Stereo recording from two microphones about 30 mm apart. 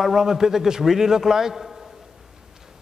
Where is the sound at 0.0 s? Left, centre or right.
Centre.